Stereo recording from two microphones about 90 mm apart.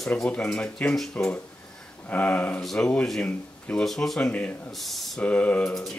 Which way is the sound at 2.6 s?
5° left (ahead or behind).